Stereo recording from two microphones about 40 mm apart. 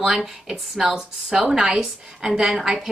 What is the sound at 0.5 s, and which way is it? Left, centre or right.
A woman's voice, centre.